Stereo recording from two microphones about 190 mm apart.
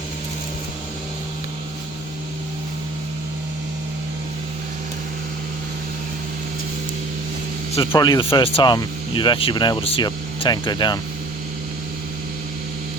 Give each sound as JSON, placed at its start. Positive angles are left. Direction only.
{"t": 7.9, "sound": "speech", "side_deg": 20}